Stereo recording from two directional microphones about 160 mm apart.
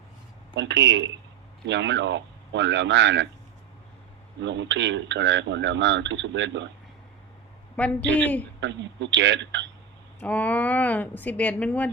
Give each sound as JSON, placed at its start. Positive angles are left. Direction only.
{"t": 0.5, "sound": "speech", "side_deg": -90}
{"t": 4.4, "sound": "speech", "side_deg": -90}
{"t": 7.8, "sound": "speech", "side_deg": 10}
{"t": 8.6, "sound": "speech", "side_deg": -90}
{"t": 10.2, "sound": "speech", "side_deg": 10}